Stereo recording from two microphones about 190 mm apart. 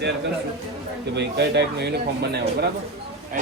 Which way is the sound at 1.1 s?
60° right (ahead or behind).